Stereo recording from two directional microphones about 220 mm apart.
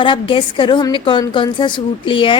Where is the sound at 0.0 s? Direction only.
20° left (ahead or behind).